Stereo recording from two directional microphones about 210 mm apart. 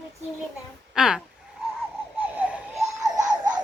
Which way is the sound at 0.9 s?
5° right (ahead or behind).